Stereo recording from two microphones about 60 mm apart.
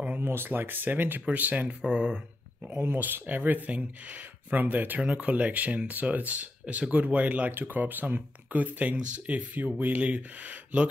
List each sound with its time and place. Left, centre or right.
0.2 s speech: right; by 2.1 s centre
2.7 s speech: right